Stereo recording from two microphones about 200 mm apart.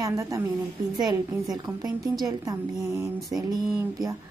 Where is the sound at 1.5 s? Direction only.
20° right (ahead or behind).